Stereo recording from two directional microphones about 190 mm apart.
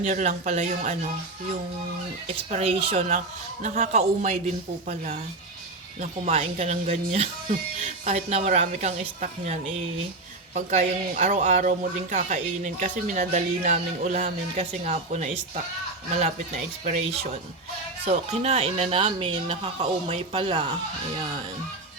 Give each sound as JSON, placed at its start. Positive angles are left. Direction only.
{"t": 0.0, "sound": "a man's voice", "side_deg": -40}
{"t": 2.5, "sound": "a man's voice", "side_deg": -35}
{"t": 6.0, "sound": "a man's voice", "side_deg": -35}